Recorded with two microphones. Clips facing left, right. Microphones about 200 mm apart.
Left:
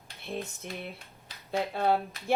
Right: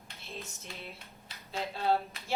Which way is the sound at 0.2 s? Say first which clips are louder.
Left 9 dB; 60° left (ahead or behind).